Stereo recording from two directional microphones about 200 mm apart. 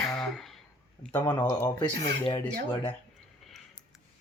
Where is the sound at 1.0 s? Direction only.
5° left (ahead or behind).